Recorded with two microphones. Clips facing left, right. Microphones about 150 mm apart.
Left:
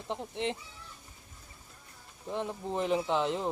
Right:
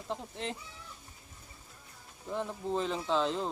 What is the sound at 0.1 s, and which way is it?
Speech, 20° left (ahead or behind).